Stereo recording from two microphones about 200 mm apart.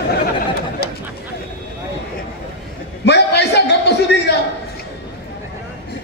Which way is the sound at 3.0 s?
55° left (ahead or behind).